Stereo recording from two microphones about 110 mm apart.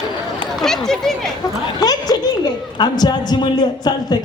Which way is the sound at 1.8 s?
35° left (ahead or behind).